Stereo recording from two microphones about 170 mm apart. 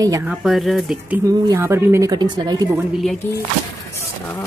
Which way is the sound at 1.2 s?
20° right (ahead or behind).